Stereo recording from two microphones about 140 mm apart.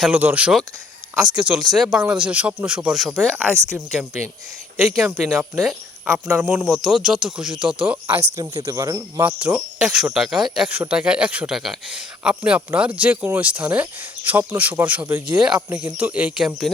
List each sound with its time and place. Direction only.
0.0 s speech: 10° right (ahead or behind)
3.7 s speech: 15° right (ahead or behind)
8.4 s speech: 25° right (ahead or behind)
9.2 s speech: 10° right (ahead or behind)